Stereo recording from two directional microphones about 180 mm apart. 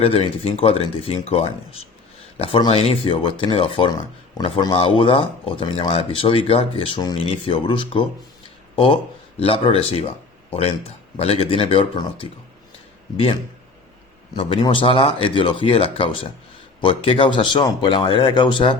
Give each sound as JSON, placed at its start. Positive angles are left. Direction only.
{"t": 0.0, "sound": "speech", "side_deg": 35}
{"t": 14.3, "sound": "speech", "side_deg": 25}